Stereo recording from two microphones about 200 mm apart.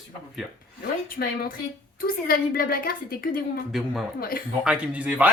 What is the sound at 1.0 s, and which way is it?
A woman's voice, 45° left (ahead or behind).